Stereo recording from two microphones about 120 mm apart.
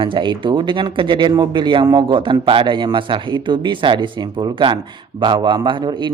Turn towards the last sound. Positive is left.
turn(degrees=-40)  # may be behind; listen again after turning